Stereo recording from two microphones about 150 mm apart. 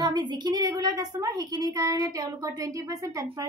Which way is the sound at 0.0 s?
25° right (ahead or behind).